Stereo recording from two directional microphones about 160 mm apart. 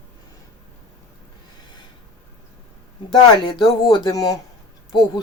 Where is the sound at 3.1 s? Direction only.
25° left (ahead or behind).